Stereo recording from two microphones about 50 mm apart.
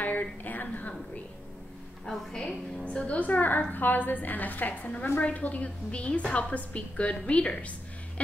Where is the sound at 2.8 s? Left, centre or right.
Left.